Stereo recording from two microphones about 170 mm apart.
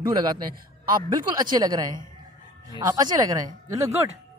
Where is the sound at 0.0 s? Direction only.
25° right (ahead or behind).